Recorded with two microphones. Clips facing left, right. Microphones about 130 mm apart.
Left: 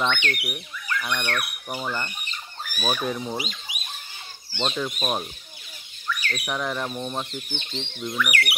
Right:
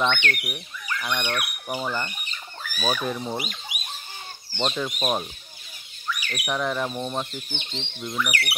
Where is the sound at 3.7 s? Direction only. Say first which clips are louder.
Right 1 dB; 55° right (ahead or behind).